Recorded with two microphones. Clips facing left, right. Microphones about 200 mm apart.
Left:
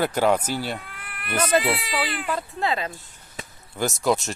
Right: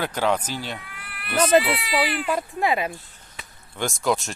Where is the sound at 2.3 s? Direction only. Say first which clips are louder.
Right 1 dB; 15° right (ahead or behind).